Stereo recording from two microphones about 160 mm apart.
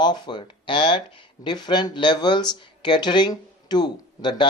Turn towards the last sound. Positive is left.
turn(degrees=30)  # may be behind; listen again after turning